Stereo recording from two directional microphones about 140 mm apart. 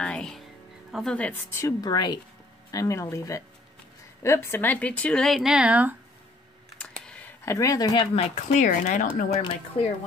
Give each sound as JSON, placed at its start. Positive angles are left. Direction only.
{"t": 0.0, "sound": "music", "side_deg": 5}
{"t": 0.9, "sound": "a woman's voice", "side_deg": 5}
{"t": 6.8, "sound": "a sound", "side_deg": 10}
{"t": 7.5, "sound": "a woman's voice", "side_deg": 25}
{"t": 8.5, "sound": "speech", "side_deg": 65}
{"t": 9.8, "sound": "speech", "side_deg": 40}